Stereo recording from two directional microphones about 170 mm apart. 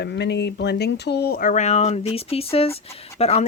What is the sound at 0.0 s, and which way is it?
Speech, 80° left.